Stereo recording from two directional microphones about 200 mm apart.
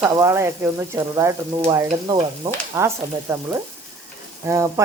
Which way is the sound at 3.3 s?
15° right (ahead or behind).